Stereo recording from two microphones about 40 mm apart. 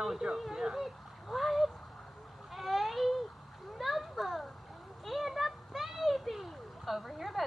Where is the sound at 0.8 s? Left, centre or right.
Centre.